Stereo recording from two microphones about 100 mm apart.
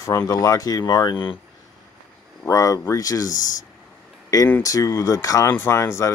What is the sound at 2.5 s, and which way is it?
Speech, 35° left (ahead or behind).